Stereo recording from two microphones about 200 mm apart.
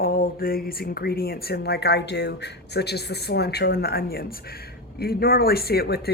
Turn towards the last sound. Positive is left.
turn(degrees=50)  # may be behind; listen again after turning